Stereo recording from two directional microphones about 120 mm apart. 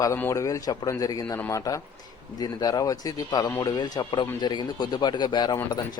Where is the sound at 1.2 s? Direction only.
20° left (ahead or behind).